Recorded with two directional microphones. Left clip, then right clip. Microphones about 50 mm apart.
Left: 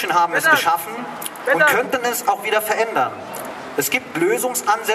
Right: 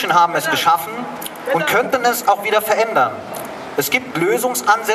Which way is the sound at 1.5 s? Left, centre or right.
Left.